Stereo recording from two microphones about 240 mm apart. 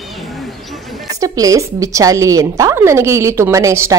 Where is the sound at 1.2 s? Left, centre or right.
Centre.